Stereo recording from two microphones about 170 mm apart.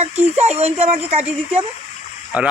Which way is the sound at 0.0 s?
40° right (ahead or behind).